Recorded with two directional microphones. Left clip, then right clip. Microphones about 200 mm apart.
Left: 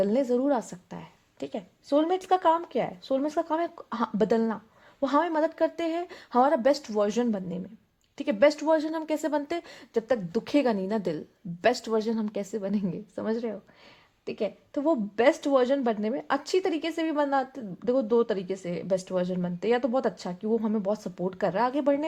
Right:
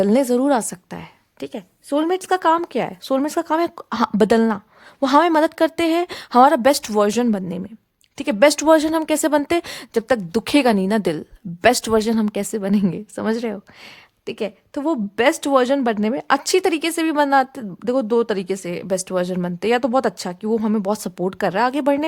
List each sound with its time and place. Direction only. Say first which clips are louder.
0.0 s a woman's voice: right 8 dB; 40° right (ahead or behind)